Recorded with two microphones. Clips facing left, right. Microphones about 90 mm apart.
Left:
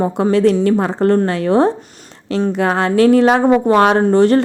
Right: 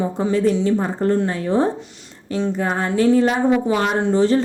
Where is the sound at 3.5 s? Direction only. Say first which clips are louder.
Left 7 dB; 65° left (ahead or behind).